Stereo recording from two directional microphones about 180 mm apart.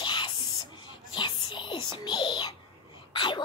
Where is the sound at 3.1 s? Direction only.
25° left (ahead or behind).